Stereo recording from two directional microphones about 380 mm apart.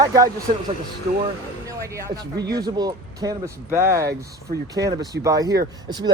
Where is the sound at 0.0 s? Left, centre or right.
Centre.